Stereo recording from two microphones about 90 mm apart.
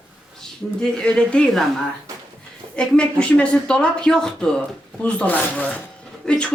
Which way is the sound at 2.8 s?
10° left (ahead or behind).